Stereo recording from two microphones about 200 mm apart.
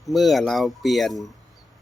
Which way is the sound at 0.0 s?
Centre (ahead or behind).